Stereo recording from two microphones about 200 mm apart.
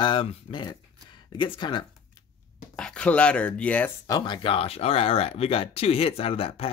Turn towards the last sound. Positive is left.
turn(degrees=30)  # may be behind; listen again after turning